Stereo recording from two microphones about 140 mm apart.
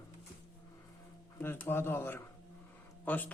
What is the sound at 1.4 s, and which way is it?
A woman's voice, 15° left (ahead or behind).